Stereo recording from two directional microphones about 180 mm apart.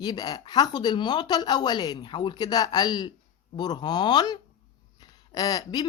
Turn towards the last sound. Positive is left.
turn(degrees=20)  # may be behind; listen again after turning